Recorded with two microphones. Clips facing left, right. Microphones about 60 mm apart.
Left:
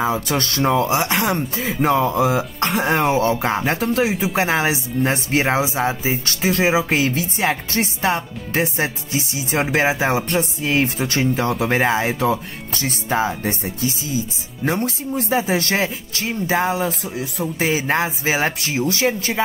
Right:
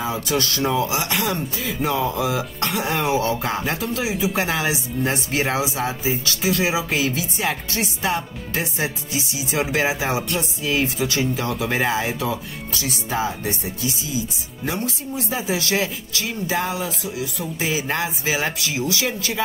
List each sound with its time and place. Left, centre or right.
0.3 s speech: left